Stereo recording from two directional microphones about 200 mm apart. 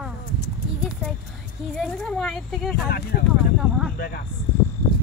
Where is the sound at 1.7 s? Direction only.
5° left (ahead or behind).